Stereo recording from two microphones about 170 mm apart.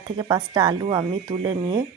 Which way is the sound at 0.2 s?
25° right (ahead or behind).